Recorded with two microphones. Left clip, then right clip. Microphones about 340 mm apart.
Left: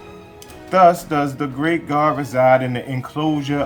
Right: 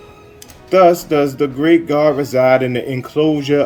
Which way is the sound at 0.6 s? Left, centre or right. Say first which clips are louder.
Right 2 dB; centre.